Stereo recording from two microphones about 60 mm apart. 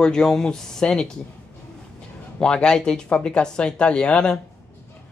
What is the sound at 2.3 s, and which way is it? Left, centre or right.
Speech, centre.